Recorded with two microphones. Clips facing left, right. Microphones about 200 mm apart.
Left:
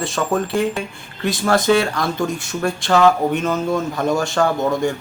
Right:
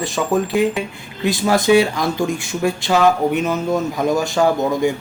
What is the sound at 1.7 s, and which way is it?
Speech, 10° right (ahead or behind).